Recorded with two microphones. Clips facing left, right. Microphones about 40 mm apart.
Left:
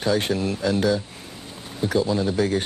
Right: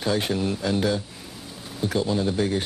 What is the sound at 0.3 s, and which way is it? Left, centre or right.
Speech, centre.